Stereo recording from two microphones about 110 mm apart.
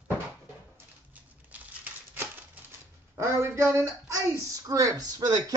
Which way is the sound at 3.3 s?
25° right (ahead or behind).